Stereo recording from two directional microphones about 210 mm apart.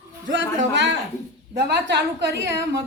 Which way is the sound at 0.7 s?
60° right (ahead or behind).